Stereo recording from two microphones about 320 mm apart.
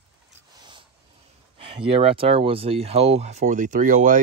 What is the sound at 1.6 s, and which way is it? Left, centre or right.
Speech, centre.